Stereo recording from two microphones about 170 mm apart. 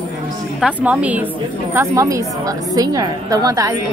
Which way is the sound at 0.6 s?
5° right (ahead or behind).